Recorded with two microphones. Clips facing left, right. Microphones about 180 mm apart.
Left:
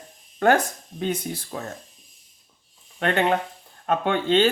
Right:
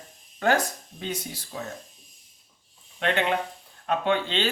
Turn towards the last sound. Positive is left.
turn(degrees=50)  # may be behind; listen again after turning